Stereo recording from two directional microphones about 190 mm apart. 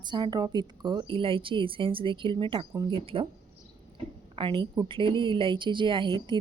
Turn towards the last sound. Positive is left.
turn(degrees=-25)  # may be behind; listen again after turning